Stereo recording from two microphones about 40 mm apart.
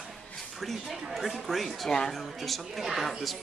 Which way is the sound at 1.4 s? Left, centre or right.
Centre.